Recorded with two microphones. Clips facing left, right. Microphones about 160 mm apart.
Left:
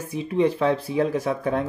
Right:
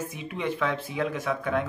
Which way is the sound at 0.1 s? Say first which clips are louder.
Left 9 dB; 35° left (ahead or behind).